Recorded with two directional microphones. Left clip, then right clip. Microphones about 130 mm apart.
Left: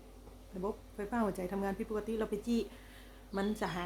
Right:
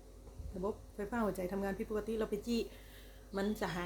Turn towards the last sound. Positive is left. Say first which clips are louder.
# left 1 dB
turn(degrees=15)  # may be behind; listen again after turning